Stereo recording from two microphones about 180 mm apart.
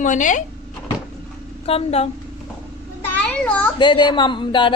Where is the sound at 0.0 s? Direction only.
45° left (ahead or behind).